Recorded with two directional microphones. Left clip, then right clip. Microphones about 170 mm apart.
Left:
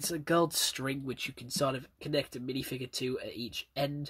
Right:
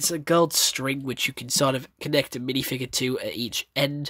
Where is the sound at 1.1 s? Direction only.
50° right (ahead or behind).